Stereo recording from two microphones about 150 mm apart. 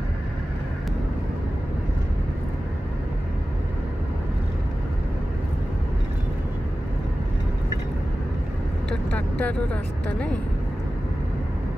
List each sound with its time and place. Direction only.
9.1 s vehicle: 10° left (ahead or behind)
10.0 s speech: 10° left (ahead or behind)